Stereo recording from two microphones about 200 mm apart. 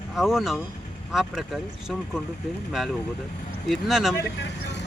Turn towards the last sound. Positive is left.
turn(degrees=60)  # may be behind; listen again after turning